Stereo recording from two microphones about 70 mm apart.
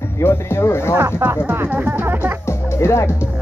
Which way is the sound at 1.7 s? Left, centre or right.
Centre.